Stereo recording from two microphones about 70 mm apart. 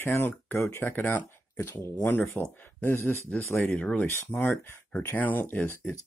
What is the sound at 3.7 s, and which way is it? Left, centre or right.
Speech, centre.